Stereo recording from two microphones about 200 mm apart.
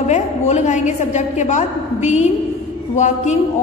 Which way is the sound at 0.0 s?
35° left (ahead or behind).